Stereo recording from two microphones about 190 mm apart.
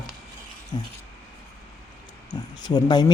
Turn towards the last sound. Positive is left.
turn(degrees=20)  # may be behind; listen again after turning